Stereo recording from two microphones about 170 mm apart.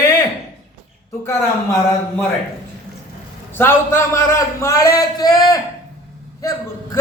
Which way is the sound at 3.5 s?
15° left (ahead or behind).